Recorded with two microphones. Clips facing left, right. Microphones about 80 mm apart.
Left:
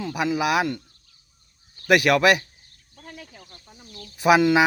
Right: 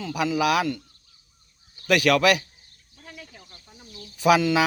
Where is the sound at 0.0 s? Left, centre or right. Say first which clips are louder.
Left 1 dB; left.